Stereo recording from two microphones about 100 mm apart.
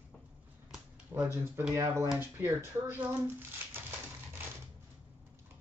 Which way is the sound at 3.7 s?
20° right (ahead or behind).